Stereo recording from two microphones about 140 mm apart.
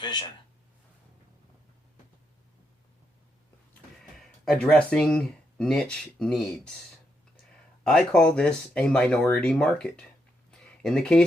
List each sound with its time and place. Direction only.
0.0 s speech: 35° left (ahead or behind)
4.2 s speech: centre (ahead or behind)
7.9 s speech: 5° left (ahead or behind)
10.5 s a sound: 5° left (ahead or behind)